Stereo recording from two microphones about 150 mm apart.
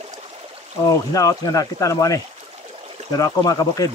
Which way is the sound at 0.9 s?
25° left (ahead or behind).